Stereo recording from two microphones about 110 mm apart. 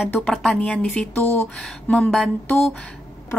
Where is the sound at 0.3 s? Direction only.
Centre (ahead or behind).